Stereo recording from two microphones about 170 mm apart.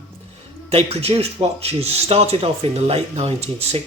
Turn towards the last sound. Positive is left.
turn(degrees=-35)  # may be behind; listen again after turning